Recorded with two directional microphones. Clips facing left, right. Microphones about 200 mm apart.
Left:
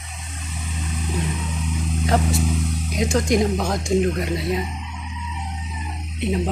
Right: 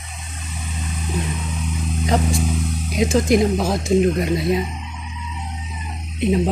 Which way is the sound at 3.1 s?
5° right (ahead or behind).